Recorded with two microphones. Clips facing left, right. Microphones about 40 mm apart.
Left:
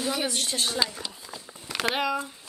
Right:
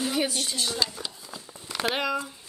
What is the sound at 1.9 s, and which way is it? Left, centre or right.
Speech, centre.